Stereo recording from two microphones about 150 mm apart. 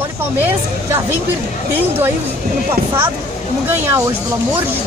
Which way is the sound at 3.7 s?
15° right (ahead or behind).